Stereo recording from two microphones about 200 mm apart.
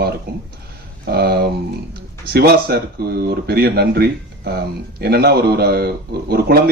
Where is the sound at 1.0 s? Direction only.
55° right (ahead or behind).